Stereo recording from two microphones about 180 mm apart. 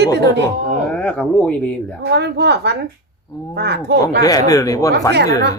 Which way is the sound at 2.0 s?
70° right (ahead or behind).